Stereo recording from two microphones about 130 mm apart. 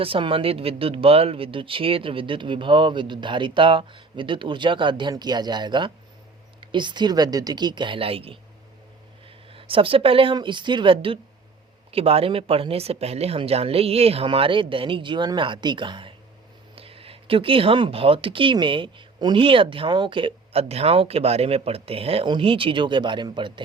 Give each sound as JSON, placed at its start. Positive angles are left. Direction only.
{"t": 0.0, "sound": "speech", "side_deg": -45}
{"t": 9.5, "sound": "speech", "side_deg": -45}